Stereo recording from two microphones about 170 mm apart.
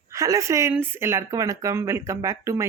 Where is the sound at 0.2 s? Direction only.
20° right (ahead or behind).